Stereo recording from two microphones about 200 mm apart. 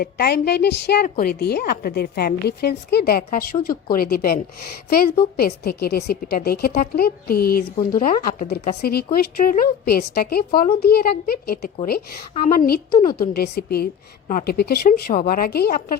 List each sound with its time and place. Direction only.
0.0 s a woman's voice: 50° left (ahead or behind)